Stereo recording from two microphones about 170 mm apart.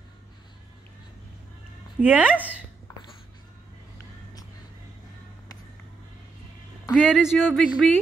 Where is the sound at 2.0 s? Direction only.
10° right (ahead or behind).